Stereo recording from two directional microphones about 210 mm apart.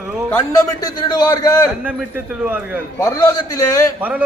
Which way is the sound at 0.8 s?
20° left (ahead or behind).